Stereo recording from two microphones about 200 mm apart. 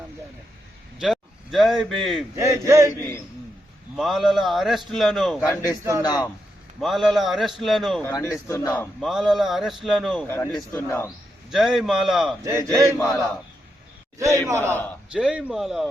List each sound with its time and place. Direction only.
0.9 s speech: centre (ahead or behind)
2.3 s speech: 15° right (ahead or behind)
3.9 s a man's voice: centre (ahead or behind)
6.0 s a man's voice: 20° left (ahead or behind)
6.7 s a man's voice: centre (ahead or behind)
8.0 s a man's voice: 15° left (ahead or behind)
9.0 s a man's voice: centre (ahead or behind)
10.2 s a man's voice: 10° left (ahead or behind)
11.5 s a man's voice: centre (ahead or behind)
12.4 s speech: 15° right (ahead or behind)
14.2 s speech: 15° right (ahead or behind)
14.7 s a man's voice: 10° left (ahead or behind)
15.1 s a man's voice: 5° right (ahead or behind)